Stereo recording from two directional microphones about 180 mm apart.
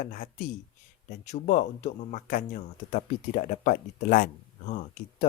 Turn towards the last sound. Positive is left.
turn(degrees=40)  # may be behind; listen again after turning